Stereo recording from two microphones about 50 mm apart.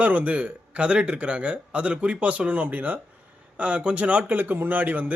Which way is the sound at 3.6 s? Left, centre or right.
Right.